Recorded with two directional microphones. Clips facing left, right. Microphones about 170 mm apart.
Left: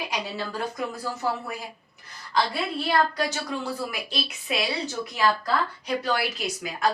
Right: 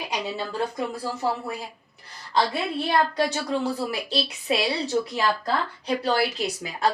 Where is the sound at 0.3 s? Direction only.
25° right (ahead or behind).